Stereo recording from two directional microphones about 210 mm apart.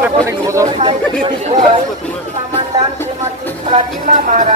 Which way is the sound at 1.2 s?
30° right (ahead or behind).